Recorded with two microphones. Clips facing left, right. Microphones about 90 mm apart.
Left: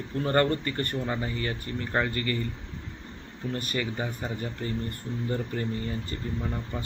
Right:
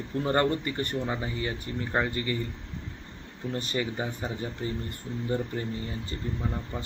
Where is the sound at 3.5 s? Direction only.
25° right (ahead or behind).